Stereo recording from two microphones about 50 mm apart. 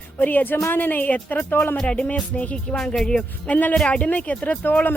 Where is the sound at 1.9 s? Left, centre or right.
Left.